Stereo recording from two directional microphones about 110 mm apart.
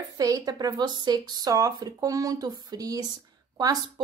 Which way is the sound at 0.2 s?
35° right (ahead or behind).